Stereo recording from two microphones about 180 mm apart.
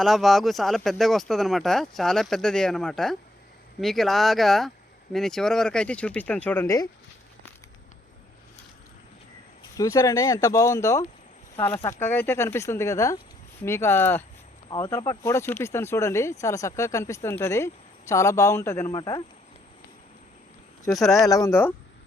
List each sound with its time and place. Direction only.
0.0 s speech: centre (ahead or behind)
9.7 s speech: 20° left (ahead or behind)
20.9 s speech: centre (ahead or behind)
21.2 s speech: 20° left (ahead or behind)